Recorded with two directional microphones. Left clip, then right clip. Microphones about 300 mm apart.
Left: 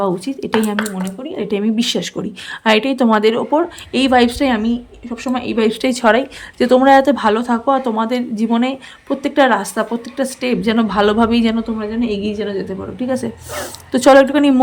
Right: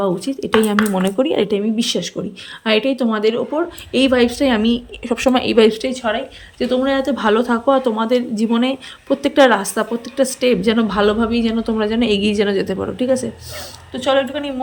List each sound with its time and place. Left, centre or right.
0.0 s speech: centre
1.2 s speech: centre
1.5 s speech: centre
5.9 s speech: centre
13.9 s a woman's voice: centre